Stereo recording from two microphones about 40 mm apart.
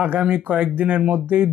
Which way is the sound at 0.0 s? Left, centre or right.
Right.